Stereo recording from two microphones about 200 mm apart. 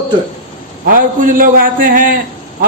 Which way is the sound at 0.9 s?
45° right (ahead or behind).